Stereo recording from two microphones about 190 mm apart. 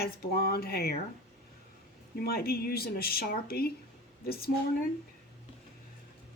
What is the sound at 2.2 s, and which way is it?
Speech, 55° left (ahead or behind).